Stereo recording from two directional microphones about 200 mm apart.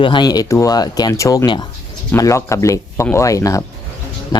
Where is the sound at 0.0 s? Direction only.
25° left (ahead or behind).